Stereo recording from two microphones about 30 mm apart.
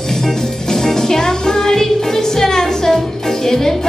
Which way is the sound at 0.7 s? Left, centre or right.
Centre.